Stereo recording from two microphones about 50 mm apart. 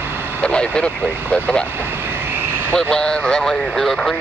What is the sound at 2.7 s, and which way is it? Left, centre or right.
Speech, centre.